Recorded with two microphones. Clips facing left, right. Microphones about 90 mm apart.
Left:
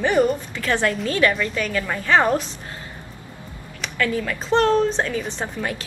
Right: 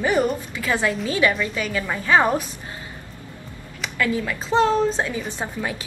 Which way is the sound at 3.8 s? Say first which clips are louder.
Even; 10° right (ahead or behind).